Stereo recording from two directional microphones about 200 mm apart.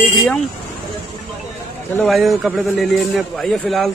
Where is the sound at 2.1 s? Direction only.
Centre (ahead or behind).